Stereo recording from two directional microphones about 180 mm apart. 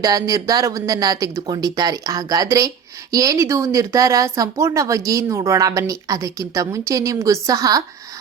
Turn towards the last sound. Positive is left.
turn(degrees=-20)  # may be behind; listen again after turning